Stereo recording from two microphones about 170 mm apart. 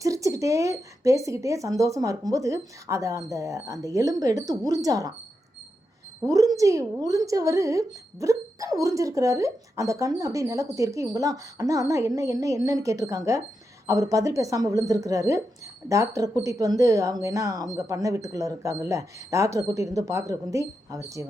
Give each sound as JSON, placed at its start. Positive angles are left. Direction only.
{"t": 0.0, "sound": "a woman's voice", "side_deg": -20}
{"t": 6.2, "sound": "a woman's voice", "side_deg": -20}